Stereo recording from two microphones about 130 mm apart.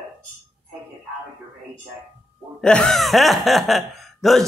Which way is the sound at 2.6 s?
5° left (ahead or behind).